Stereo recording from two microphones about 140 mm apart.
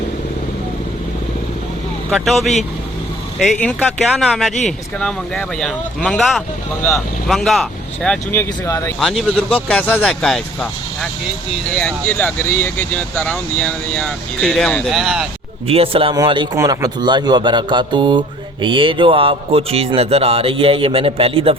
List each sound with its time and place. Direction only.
2.0 s speech: centre (ahead or behind); by 8.9 s 20° left (ahead or behind)
9.0 s speech: centre (ahead or behind)
9.6 s speech: 10° left (ahead or behind)
11.8 s speech: 10° left (ahead or behind)
15.6 s speech: 45° right (ahead or behind)